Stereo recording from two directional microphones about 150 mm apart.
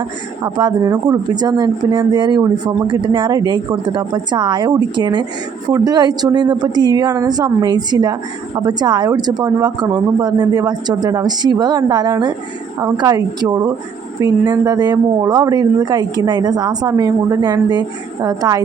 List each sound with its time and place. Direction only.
0.4 s speech: 30° right (ahead or behind)